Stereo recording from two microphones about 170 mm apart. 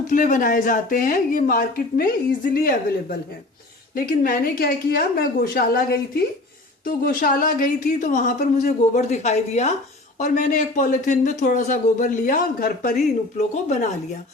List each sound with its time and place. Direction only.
0.1 s a woman's voice: 50° left (ahead or behind)
13.5 s speech: 45° left (ahead or behind)